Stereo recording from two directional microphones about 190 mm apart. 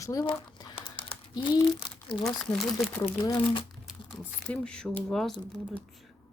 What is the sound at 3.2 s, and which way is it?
Speech, 25° left (ahead or behind).